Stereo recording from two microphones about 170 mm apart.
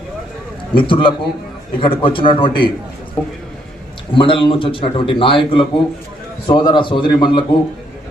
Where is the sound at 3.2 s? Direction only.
5° left (ahead or behind).